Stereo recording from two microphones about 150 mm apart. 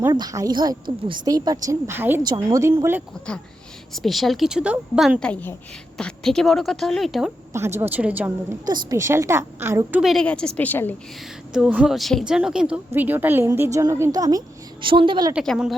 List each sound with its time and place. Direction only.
0.1 s a woman's voice: 25° right (ahead or behind)
3.9 s a woman's voice: centre (ahead or behind)
5.3 s a woman's voice: 15° left (ahead or behind)
7.5 s a woman's voice: 15° right (ahead or behind)
8.6 s a woman's voice: 25° right (ahead or behind)
10.0 s a woman's voice: centre (ahead or behind)
11.5 s a woman's voice: 5° right (ahead or behind); by 15.4 s 35° right (ahead or behind)
15.4 s a woman's voice: 5° right (ahead or behind)